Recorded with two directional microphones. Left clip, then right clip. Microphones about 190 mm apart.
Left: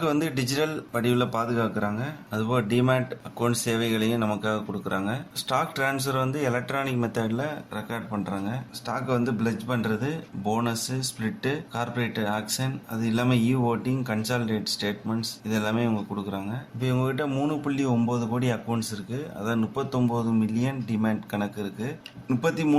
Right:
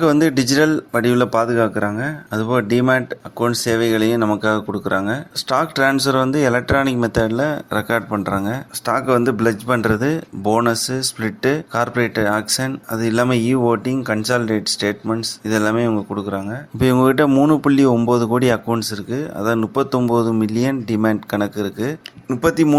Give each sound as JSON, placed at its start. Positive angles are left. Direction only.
{"t": 0.0, "sound": "speech", "side_deg": -40}